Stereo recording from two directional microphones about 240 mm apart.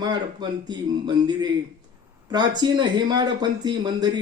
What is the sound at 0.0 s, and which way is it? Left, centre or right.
Speech, centre.